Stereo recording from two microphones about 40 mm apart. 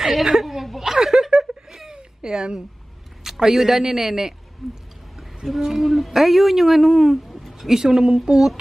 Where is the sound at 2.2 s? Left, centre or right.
Centre.